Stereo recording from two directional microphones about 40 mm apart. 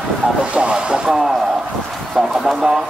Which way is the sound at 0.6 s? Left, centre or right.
Right.